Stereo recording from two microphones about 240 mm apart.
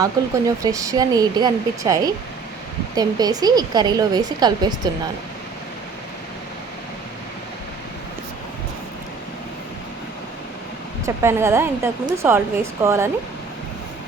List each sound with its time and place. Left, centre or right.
0.0 s speech: centre
11.0 s speech: centre